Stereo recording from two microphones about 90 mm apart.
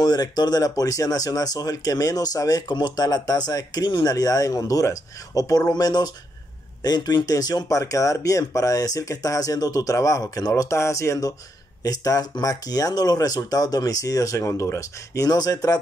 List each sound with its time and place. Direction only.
0.0 s speech: 50° left (ahead or behind)